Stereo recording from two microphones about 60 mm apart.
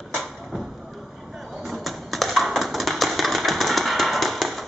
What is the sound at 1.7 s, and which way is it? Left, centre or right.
Tap, centre.